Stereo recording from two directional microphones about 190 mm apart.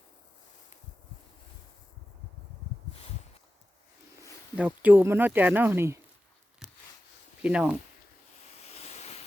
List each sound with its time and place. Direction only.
4.5 s speech: 5° right (ahead or behind)
7.4 s speech: 5° right (ahead or behind)
8.7 s waves: 35° left (ahead or behind)